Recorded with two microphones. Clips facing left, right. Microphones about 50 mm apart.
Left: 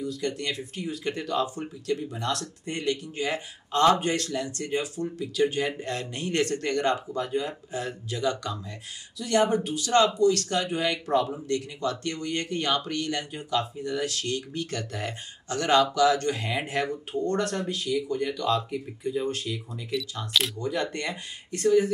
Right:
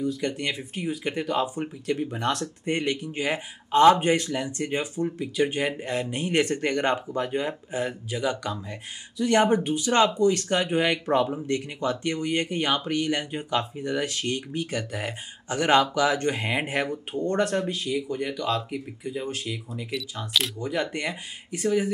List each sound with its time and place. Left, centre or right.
0.0 s speech: right
2.0 s speech: right; by 8.7 s centre
9.2 s speech: right
19.2 s speech: centre